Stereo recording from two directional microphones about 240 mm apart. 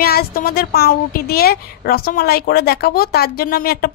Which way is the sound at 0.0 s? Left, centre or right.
Left.